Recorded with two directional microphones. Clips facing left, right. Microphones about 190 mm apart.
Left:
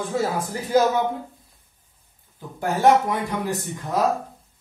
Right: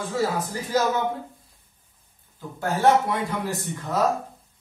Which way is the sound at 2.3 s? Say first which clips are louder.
Left 2 dB; 15° left (ahead or behind).